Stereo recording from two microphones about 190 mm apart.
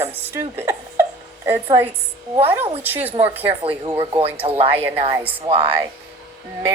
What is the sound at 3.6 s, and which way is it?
Speech, 30° right (ahead or behind).